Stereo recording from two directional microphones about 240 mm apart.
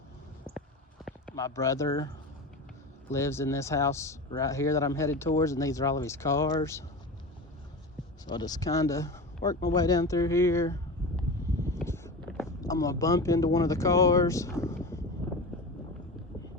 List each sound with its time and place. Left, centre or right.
0.5 s a sound: right
1.4 s speech: centre
3.1 s speech: centre
8.3 s speech: centre
11.2 s a sound: centre
12.6 s speech: centre